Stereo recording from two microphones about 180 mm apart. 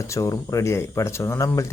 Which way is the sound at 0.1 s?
15° left (ahead or behind).